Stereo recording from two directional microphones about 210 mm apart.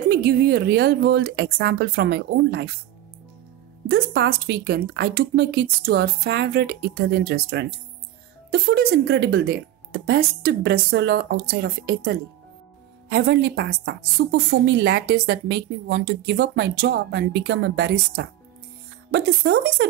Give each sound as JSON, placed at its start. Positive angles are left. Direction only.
{"t": 0.1, "sound": "a woman's voice", "side_deg": -50}
{"t": 3.9, "sound": "a woman's voice", "side_deg": -50}